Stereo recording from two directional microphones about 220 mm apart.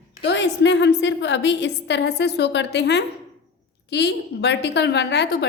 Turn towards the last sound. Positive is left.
turn(degrees=50)  # may be behind; listen again after turning